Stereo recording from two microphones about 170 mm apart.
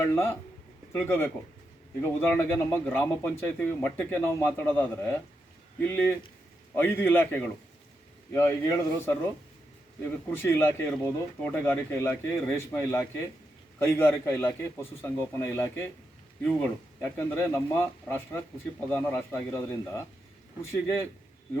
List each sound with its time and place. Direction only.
0.0 s speech: 15° left (ahead or behind)
2.7 s speech: 10° left (ahead or behind)